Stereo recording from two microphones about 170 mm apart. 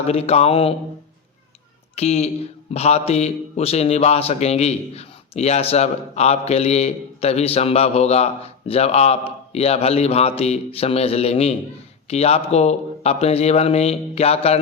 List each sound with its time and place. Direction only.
0.1 s a man's voice: 35° left (ahead or behind)
2.0 s a man's voice: 40° left (ahead or behind)